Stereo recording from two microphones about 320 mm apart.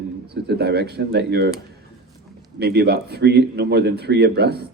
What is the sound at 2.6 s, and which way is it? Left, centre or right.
Speech, right.